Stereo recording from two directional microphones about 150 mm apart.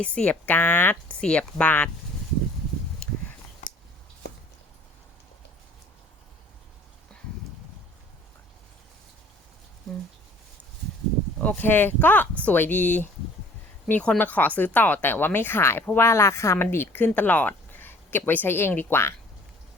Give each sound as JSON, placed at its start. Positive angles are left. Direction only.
{"t": 0.0, "sound": "speech", "side_deg": 10}
{"t": 3.6, "sound": "a sound", "side_deg": 60}
{"t": 11.3, "sound": "speech", "side_deg": 10}